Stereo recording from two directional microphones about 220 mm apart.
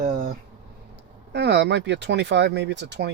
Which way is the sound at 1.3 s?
50° right (ahead or behind).